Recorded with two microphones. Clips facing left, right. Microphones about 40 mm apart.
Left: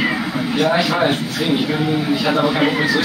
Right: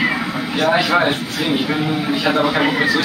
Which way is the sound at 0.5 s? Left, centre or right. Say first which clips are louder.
Right 1 dB; right.